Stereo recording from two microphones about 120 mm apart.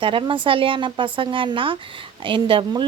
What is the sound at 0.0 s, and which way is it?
A woman's voice, 45° right (ahead or behind).